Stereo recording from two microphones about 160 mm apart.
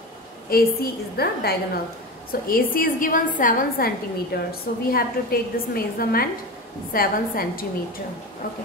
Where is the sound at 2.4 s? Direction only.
65° left (ahead or behind).